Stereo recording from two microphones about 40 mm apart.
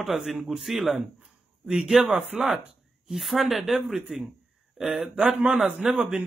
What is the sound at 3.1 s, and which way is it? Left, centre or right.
A man's voice, centre.